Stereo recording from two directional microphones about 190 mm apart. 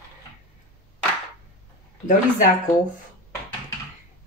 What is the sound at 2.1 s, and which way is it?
Speech, 45° left (ahead or behind).